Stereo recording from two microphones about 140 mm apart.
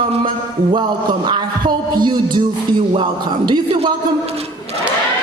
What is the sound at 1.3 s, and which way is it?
Music, 30° right (ahead or behind).